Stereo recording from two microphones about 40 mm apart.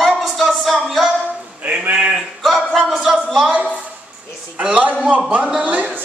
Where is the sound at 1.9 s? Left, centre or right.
Right.